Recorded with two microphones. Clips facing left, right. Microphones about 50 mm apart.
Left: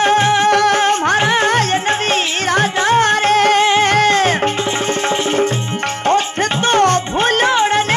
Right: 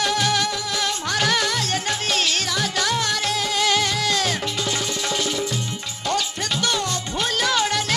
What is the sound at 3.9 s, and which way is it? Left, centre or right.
Music, left.